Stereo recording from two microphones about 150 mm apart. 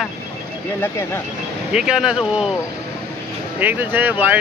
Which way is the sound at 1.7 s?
5° right (ahead or behind).